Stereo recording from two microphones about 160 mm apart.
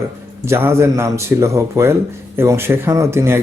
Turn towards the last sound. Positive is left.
turn(degrees=-15)  # may be behind; listen again after turning